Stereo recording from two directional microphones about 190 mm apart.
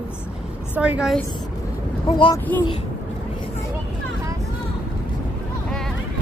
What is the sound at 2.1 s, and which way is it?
Speech, 25° left (ahead or behind).